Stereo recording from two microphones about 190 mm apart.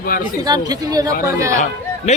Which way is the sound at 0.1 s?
50° left (ahead or behind).